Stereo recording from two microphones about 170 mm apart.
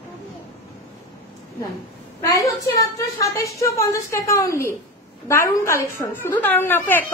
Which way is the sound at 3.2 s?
20° left (ahead or behind).